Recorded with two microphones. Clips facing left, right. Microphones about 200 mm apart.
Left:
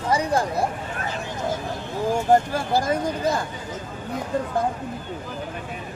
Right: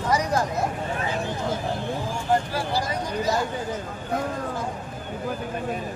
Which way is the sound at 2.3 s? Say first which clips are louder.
Left 4 dB; 50° left (ahead or behind).